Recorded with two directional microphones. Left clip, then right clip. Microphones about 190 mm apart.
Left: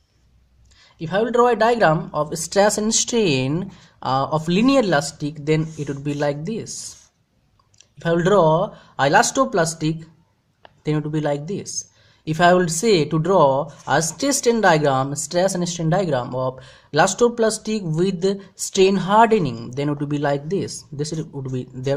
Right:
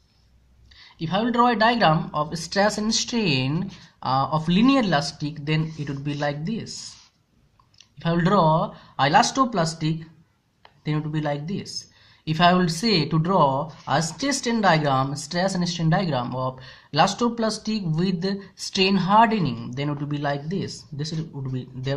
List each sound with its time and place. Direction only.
1.0 s speech: 35° left (ahead or behind)
7.9 s speech: 35° left (ahead or behind)